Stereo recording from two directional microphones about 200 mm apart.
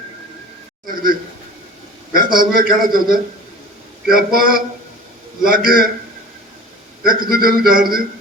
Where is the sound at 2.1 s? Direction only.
45° right (ahead or behind).